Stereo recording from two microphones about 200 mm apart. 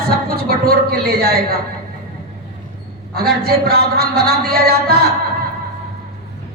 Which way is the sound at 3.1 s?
50° right (ahead or behind).